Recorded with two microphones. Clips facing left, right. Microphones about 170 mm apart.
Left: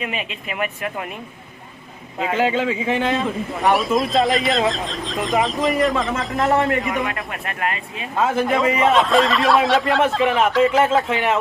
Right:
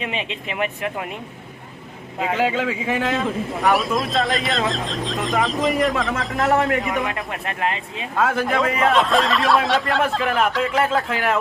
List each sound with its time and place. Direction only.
0.0 s speech: 25° right (ahead or behind)
2.1 s a man's voice: centre (ahead or behind)
8.2 s a man's voice: centre (ahead or behind)